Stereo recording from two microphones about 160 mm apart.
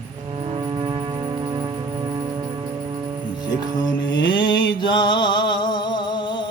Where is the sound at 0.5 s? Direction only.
35° right (ahead or behind).